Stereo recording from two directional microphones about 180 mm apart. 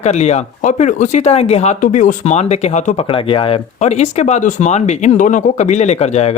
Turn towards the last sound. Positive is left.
turn(degrees=35)  # may be behind; listen again after turning